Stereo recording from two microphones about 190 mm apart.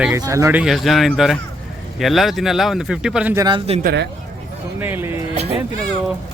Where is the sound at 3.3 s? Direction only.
20° right (ahead or behind).